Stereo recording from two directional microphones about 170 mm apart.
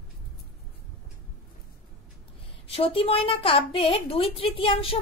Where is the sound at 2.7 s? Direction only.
35° left (ahead or behind).